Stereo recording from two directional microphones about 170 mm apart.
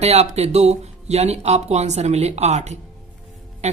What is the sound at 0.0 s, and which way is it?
Speech, 40° right (ahead or behind).